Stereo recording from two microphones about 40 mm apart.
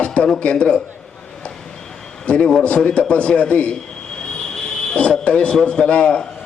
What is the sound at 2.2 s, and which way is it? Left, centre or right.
A man's voice, left.